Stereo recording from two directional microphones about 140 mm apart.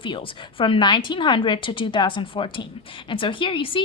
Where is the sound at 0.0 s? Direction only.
40° left (ahead or behind).